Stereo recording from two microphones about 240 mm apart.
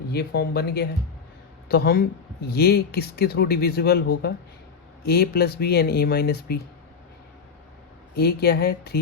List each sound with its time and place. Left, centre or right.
0.1 s speech: left
8.1 s speech: left